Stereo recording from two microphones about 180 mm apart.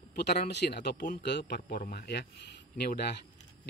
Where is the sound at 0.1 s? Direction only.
65° left (ahead or behind).